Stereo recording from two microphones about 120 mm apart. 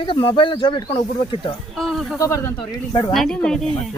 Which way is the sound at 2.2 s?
25° left (ahead or behind).